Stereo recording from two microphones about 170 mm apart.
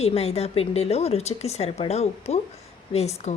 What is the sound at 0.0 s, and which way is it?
A woman's voice, 35° left (ahead or behind).